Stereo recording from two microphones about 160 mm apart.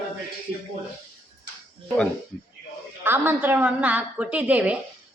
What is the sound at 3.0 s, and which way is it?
A woman's voice, 15° right (ahead or behind).